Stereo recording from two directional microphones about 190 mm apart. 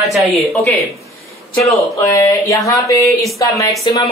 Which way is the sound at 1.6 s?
15° left (ahead or behind).